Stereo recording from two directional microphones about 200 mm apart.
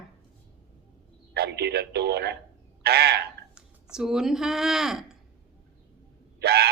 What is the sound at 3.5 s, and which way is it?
Speech, 5° right (ahead or behind).